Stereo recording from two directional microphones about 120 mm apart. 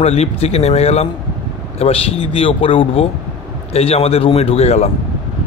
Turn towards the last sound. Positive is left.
turn(degrees=65)  # may be behind; listen again after turning